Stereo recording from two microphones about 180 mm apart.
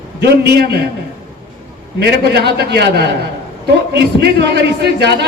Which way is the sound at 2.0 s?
65° right (ahead or behind).